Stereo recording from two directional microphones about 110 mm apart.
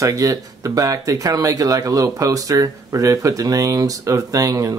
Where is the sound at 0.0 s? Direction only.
30° right (ahead or behind).